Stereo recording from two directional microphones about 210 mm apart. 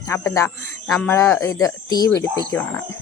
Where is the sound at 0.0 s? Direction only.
15° left (ahead or behind).